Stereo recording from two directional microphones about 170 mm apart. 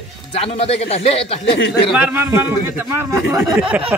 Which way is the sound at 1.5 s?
85° left.